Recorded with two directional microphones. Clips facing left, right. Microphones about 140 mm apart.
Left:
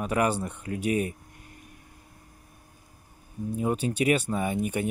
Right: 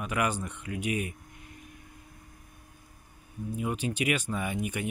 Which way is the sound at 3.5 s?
35° left (ahead or behind).